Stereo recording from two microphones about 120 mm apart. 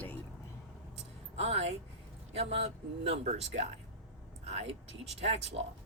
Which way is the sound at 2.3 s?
60° right (ahead or behind).